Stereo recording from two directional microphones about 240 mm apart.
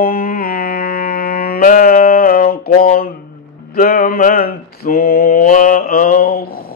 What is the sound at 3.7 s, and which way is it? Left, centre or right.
Mantra, left.